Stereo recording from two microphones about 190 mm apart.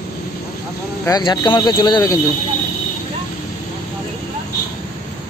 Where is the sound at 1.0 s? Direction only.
20° left (ahead or behind).